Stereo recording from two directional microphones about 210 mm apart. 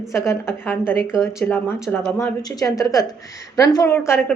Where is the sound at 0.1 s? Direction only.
15° left (ahead or behind).